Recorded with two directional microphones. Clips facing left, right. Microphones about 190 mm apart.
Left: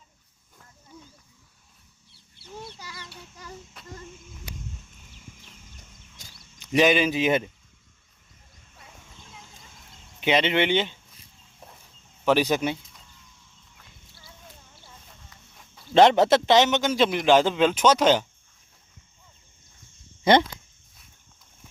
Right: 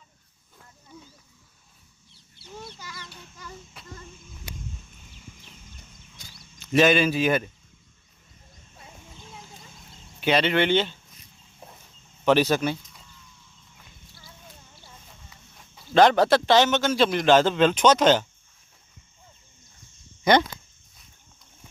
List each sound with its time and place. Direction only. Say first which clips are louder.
2.7 s chicken: even; 30° left (ahead or behind)
6.2 s a sound: right 1 dB; 45° left (ahead or behind)
6.6 s a man's voice: right 1 dB; 15° left (ahead or behind)
10.2 s speech: even; 20° left (ahead or behind)
12.2 s a man's voice: right 1 dB; 10° left (ahead or behind)
15.3 s a sound: right 1 dB; 5° right (ahead or behind)
16.0 s a man's voice: left 1 dB; 25° left (ahead or behind)
20.3 s speech: left 1 dB; 25° left (ahead or behind)